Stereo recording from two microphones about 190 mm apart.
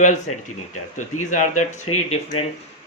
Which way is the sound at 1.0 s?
40° left (ahead or behind).